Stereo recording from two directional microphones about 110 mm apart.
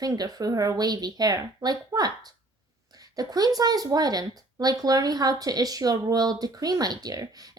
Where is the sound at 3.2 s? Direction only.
35° right (ahead or behind).